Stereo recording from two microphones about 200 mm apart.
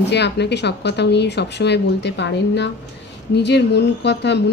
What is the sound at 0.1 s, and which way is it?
A woman's voice, 60° left (ahead or behind).